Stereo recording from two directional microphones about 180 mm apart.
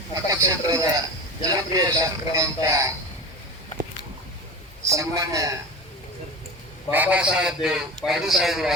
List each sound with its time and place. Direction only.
0.3 s a man's voice: 20° right (ahead or behind)
4.8 s a man's voice: 15° right (ahead or behind)
6.9 s a man's voice: 10° right (ahead or behind)